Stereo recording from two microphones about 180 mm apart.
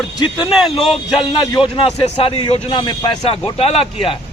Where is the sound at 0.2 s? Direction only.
25° left (ahead or behind).